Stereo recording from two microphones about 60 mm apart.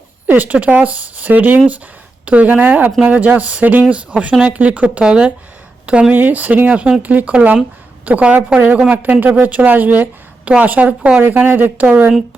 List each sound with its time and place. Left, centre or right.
0.3 s speech: right
6.1 s a woman's voice: right
11.2 s speech: right